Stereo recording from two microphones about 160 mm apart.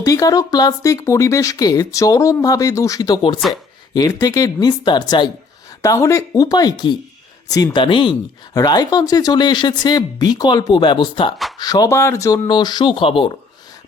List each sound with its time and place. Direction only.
0.0 s speech: 20° left (ahead or behind)